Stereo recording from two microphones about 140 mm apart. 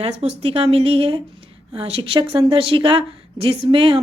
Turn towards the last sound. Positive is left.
turn(degrees=-40)  # may be behind; listen again after turning